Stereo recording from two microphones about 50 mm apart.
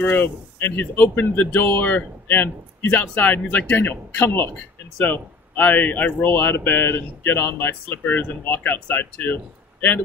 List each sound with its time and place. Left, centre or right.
0.0 s speech: left
3.7 s speech: left
5.0 s speech: left
6.2 s speech: left